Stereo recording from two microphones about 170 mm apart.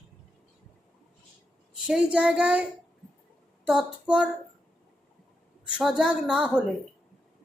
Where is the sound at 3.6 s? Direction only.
5° right (ahead or behind).